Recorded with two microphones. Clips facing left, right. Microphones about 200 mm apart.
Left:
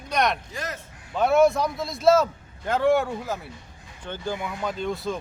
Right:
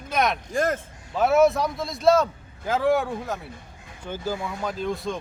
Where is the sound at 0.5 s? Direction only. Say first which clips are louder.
Right 10 dB; 50° right (ahead or behind).